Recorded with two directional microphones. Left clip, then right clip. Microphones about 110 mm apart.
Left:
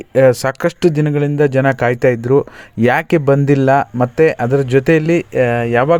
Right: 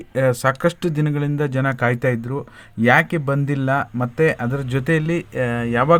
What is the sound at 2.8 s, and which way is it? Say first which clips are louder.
Speech: left 3 dB; 90° left.